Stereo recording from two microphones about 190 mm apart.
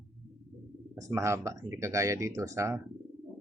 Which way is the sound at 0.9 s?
15° right (ahead or behind).